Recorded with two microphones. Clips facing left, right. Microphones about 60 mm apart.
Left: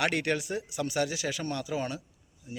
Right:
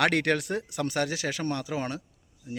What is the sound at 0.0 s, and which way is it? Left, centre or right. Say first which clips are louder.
Speech: right 4 dB; right.